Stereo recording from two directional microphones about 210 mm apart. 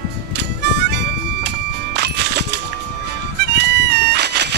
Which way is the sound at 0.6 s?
55° right (ahead or behind).